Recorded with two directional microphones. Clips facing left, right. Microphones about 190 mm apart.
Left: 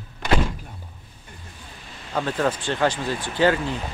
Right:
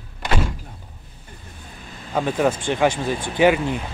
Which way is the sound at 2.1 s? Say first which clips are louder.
Right 3 dB; 10° right (ahead or behind).